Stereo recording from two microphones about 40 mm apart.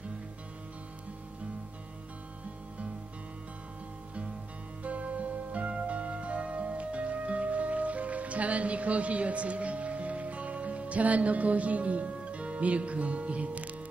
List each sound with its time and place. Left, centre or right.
4.8 s music: right